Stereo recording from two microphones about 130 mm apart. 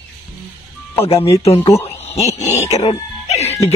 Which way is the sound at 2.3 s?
60° left (ahead or behind).